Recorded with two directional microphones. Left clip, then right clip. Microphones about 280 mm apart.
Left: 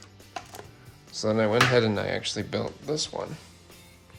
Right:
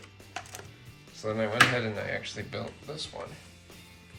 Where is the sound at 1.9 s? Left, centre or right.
Centre.